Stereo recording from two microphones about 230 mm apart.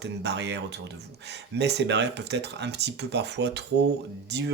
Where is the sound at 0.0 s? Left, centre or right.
Right.